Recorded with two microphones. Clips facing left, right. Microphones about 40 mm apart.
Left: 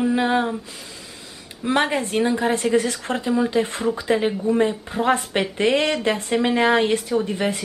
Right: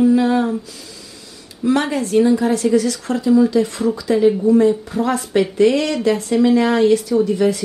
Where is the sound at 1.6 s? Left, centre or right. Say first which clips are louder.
Right 3 dB; left.